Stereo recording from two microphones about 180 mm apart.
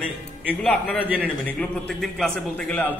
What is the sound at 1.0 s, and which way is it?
Speech, 10° right (ahead or behind).